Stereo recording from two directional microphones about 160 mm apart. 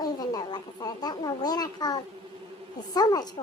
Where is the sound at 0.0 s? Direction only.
25° left (ahead or behind).